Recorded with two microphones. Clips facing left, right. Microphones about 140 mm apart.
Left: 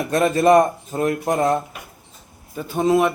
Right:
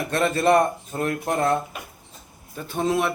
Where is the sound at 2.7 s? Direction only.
10° left (ahead or behind).